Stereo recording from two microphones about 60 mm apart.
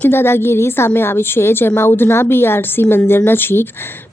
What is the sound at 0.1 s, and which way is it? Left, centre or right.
A woman's voice, left.